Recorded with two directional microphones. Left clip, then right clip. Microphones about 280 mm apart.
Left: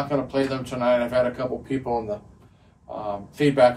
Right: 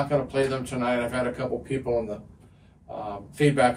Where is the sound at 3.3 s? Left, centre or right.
Centre.